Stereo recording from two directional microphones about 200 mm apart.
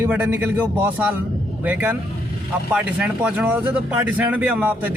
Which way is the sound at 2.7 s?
5° right (ahead or behind).